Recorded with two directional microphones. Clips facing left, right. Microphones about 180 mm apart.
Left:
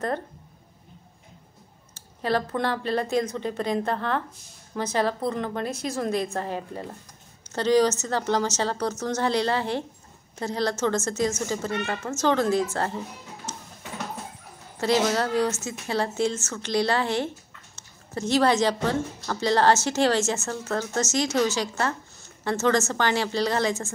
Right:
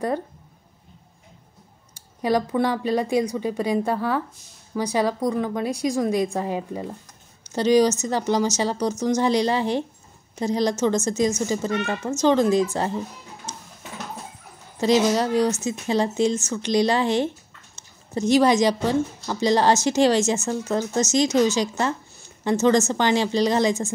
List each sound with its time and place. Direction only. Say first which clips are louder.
2.0 s a woman's voice: right 4 dB; 15° right (ahead or behind)
13.5 s music: even; 15° right (ahead or behind)
14.8 s a woman's voice: right 4 dB; 15° right (ahead or behind)